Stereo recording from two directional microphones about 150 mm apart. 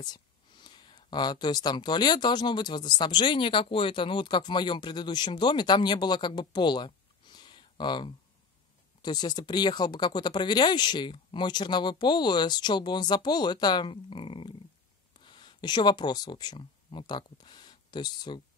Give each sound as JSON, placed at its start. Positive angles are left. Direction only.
{"t": 0.0, "sound": "speech", "side_deg": 30}